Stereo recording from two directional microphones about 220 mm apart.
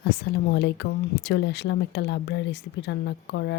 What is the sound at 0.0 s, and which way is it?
Speech, 50° left (ahead or behind).